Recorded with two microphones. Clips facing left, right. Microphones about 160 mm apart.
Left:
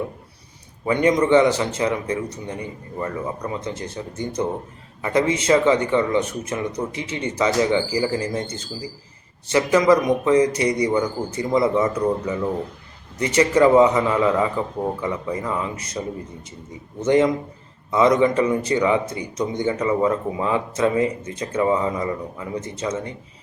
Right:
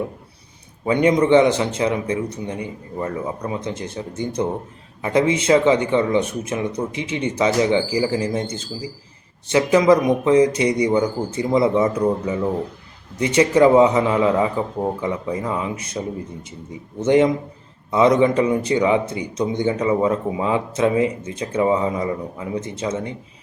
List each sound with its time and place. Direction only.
0.9 s speech: 15° right (ahead or behind)
5.0 s speech: 15° right (ahead or behind)
9.5 s speech: 15° right (ahead or behind)
17.1 s speech: 15° right (ahead or behind)